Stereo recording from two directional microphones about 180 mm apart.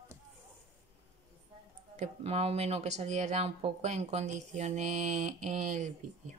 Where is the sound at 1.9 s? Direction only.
35° right (ahead or behind).